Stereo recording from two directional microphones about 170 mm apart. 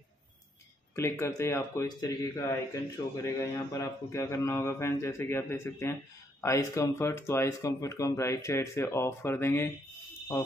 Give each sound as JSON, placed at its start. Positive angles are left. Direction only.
{"t": 0.9, "sound": "speech", "side_deg": 15}